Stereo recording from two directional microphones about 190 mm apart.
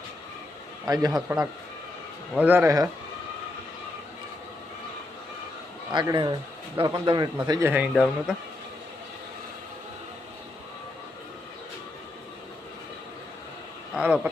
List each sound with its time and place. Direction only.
1.1 s speech: centre (ahead or behind)
5.9 s speech: 25° right (ahead or behind)
7.7 s speech: 5° right (ahead or behind)
13.9 s speech: 5° right (ahead or behind)